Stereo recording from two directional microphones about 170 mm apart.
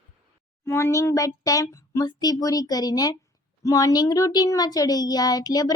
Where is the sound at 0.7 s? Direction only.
15° left (ahead or behind).